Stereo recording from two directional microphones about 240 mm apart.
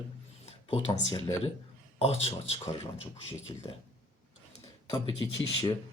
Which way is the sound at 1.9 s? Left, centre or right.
Left.